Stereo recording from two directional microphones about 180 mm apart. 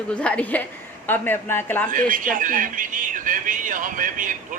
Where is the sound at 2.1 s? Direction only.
45° right (ahead or behind).